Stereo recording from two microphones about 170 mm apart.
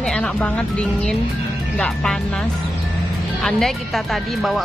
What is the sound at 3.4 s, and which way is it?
Speech, centre (ahead or behind).